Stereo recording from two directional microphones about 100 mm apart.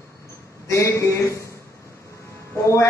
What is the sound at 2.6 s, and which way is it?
Speech, 30° left (ahead or behind).